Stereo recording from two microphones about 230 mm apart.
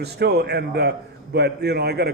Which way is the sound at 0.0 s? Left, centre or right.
Right.